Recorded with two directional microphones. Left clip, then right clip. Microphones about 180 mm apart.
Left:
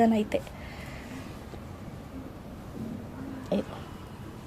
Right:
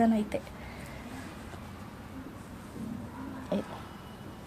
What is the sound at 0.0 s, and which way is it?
Speech, 20° left (ahead or behind).